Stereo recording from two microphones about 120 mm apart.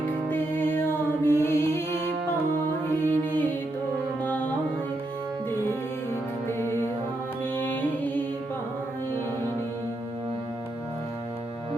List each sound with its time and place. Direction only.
0.3 s music: 15° left (ahead or behind)
3.0 s music: 15° left (ahead or behind)
7.5 s music: 15° left (ahead or behind)